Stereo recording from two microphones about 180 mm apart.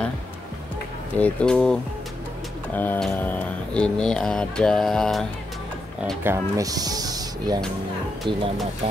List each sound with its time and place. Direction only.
1.1 s speech: 5° left (ahead or behind)
6.2 s speech: 15° right (ahead or behind)